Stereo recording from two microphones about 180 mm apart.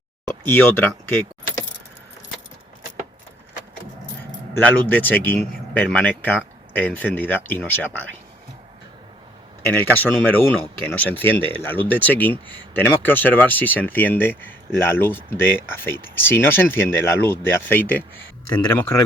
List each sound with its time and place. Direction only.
0.4 s speech: 10° left (ahead or behind)
4.5 s speech: 10° left (ahead or behind)
9.6 s speech: 10° left (ahead or behind)